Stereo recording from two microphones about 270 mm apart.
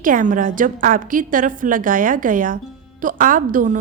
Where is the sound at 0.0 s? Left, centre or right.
Right.